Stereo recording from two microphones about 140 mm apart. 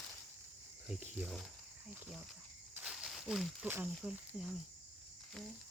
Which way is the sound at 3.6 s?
15° right (ahead or behind).